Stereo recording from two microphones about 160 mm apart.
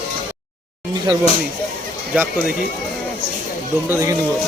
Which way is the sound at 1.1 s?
25° right (ahead or behind).